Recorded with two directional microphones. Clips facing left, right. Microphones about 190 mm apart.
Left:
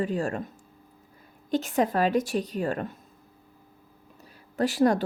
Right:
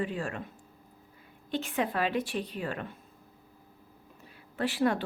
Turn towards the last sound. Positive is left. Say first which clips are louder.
# left 6 dB
turn(degrees=40)  # may be behind; listen again after turning